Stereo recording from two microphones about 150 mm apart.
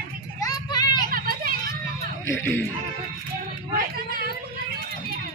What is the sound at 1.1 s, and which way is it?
Children playing, 75° right (ahead or behind).